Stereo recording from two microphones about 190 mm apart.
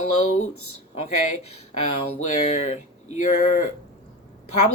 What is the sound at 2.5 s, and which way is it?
Speech, 35° left (ahead or behind).